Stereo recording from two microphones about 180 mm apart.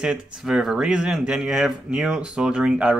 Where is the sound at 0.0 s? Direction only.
5° right (ahead or behind).